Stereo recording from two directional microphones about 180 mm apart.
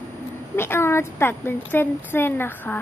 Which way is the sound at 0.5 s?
15° left (ahead or behind).